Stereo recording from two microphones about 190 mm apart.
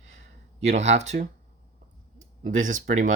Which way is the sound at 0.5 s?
35° right (ahead or behind).